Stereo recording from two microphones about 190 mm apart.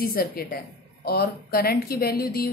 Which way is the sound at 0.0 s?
55° left (ahead or behind).